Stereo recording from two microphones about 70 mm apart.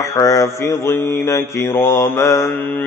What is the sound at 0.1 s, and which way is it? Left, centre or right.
Mantra, left.